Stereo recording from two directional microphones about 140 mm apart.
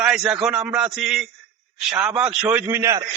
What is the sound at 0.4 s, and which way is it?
A man's voice, 10° right (ahead or behind).